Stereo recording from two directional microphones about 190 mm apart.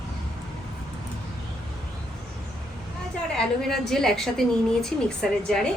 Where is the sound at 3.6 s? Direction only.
Centre (ahead or behind).